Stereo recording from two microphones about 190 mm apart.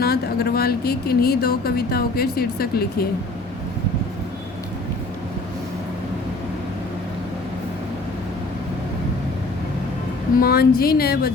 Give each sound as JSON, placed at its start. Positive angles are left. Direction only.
{"t": 0.0, "sound": "speech", "side_deg": 55}
{"t": 10.3, "sound": "speech", "side_deg": 55}